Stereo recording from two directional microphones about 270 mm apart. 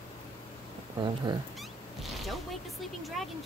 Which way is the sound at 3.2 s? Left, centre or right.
Centre.